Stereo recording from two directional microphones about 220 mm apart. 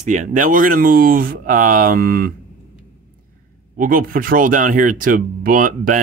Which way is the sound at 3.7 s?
40° right (ahead or behind).